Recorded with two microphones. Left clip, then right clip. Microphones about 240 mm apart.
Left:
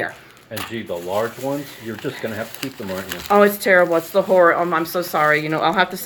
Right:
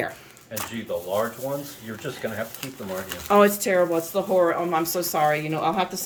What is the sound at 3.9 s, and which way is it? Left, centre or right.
Speech, left.